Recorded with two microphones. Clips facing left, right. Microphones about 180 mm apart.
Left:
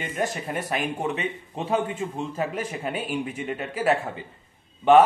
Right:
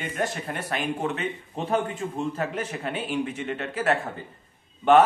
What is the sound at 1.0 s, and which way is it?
Speech, 15° left (ahead or behind).